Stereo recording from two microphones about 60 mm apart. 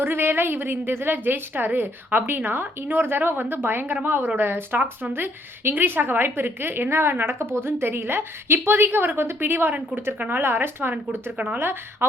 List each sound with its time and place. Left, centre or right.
0.0 s a woman's voice: right